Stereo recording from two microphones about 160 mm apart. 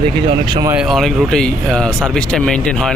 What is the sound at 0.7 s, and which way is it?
Speech, centre (ahead or behind).